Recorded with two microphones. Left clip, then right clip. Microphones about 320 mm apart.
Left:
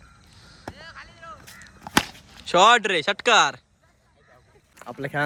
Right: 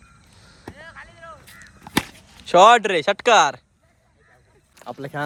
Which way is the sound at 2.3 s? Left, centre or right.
Centre.